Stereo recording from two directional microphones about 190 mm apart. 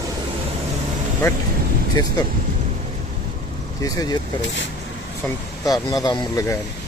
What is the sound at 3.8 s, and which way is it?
Speech, 20° left (ahead or behind).